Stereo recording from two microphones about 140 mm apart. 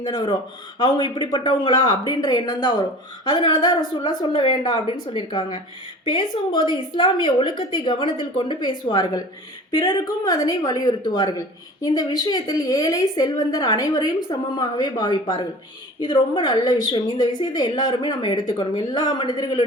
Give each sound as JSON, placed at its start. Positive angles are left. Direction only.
{"t": 0.0, "sound": "a woman's voice", "side_deg": 25}
{"t": 6.7, "sound": "a woman's voice", "side_deg": 35}
{"t": 10.2, "sound": "a woman's voice", "side_deg": 25}